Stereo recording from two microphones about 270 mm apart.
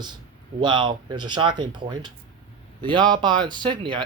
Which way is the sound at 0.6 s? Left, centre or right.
Centre.